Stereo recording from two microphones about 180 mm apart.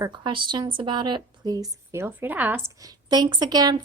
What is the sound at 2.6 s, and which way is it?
A woman's voice, 20° right (ahead or behind).